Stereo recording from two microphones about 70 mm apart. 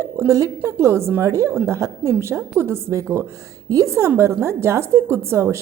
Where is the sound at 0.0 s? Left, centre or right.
Right.